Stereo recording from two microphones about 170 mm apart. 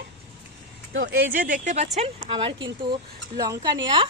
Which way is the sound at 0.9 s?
75° right (ahead or behind).